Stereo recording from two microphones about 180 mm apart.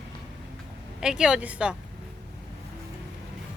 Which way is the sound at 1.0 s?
5° right (ahead or behind).